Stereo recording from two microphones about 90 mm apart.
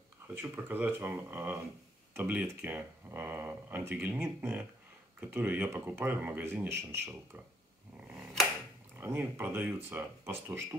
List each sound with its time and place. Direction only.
0.3 s speech: 25° right (ahead or behind)
8.9 s speech: 25° right (ahead or behind)